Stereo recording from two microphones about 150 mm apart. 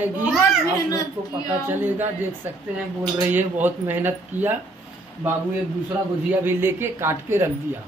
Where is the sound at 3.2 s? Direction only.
10° right (ahead or behind).